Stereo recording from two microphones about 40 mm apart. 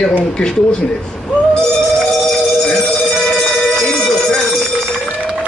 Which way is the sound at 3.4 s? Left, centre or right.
Centre.